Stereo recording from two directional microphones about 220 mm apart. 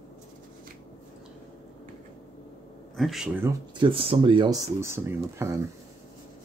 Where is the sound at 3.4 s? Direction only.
20° right (ahead or behind).